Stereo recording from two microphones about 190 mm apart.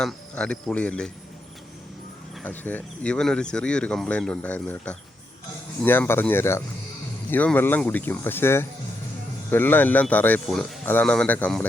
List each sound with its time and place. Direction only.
0.0 s speech: 5° left (ahead or behind)
2.4 s speech: 10° left (ahead or behind)